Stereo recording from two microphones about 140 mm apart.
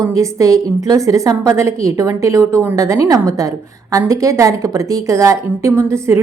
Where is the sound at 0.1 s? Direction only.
25° right (ahead or behind).